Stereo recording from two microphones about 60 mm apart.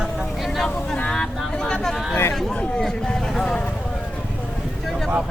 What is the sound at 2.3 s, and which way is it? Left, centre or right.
Chatter, centre.